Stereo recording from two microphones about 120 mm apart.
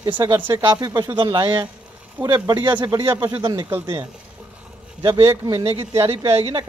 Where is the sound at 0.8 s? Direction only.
30° right (ahead or behind).